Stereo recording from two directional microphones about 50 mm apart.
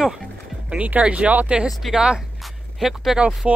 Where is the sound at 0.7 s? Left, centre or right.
Right; by 3.2 s centre.